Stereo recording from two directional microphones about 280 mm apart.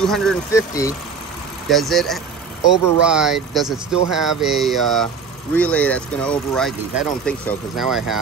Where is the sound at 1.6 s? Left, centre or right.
Centre.